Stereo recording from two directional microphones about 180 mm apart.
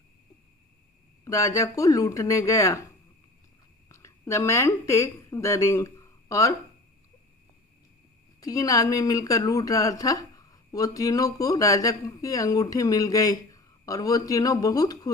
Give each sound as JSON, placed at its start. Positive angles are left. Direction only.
{"t": 1.2, "sound": "speech", "side_deg": 15}
{"t": 3.8, "sound": "speech", "side_deg": 15}
{"t": 8.4, "sound": "speech", "side_deg": 20}